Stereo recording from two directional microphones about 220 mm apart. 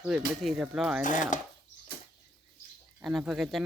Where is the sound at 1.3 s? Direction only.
35° left (ahead or behind).